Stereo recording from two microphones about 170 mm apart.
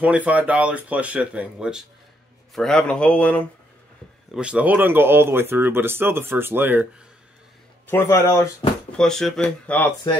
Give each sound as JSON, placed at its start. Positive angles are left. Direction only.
{"t": 0.0, "sound": "speech", "side_deg": -10}
{"t": 4.3, "sound": "speech", "side_deg": -5}
{"t": 7.9, "sound": "speech", "side_deg": 15}
{"t": 8.9, "sound": "speech", "side_deg": 5}